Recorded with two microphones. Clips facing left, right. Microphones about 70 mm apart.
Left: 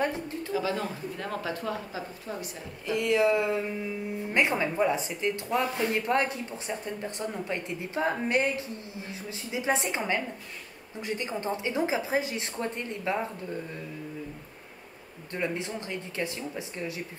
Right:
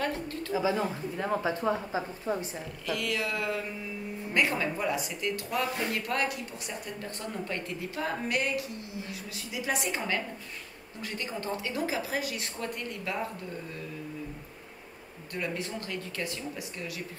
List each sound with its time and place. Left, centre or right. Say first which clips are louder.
0.0 s a sound: left 2 dB; centre
0.5 s speech: right 2 dB; centre
2.9 s a woman's voice: left 8 dB; left
15.3 s a woman's voice: left 3 dB; left